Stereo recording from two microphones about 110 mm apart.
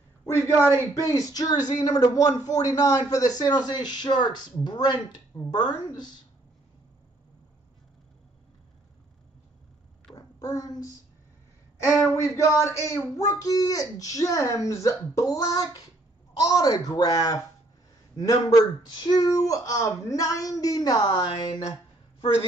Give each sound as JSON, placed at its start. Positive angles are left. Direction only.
{"t": 0.2, "sound": "a sound", "side_deg": 30}
{"t": 0.9, "sound": "speech", "side_deg": 35}
{"t": 10.1, "sound": "child singing", "side_deg": 30}
{"t": 11.9, "sound": "speech", "side_deg": 0}
{"t": 12.2, "sound": "speech", "side_deg": 25}